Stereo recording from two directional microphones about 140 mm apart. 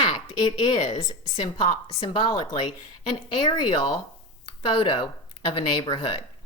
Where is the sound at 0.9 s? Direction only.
30° left (ahead or behind).